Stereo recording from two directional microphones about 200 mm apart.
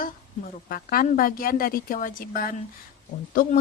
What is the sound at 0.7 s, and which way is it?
Speech, 45° left (ahead or behind).